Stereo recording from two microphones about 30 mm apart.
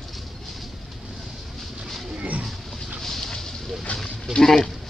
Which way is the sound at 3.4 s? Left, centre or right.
Centre.